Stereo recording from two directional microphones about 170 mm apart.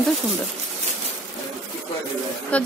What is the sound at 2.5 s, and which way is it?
Music, 10° left (ahead or behind).